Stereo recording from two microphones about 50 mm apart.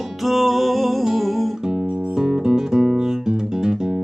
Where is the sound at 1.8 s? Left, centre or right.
Right.